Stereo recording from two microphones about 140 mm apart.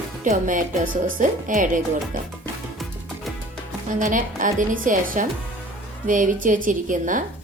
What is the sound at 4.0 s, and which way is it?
A woman's voice, 70° right (ahead or behind).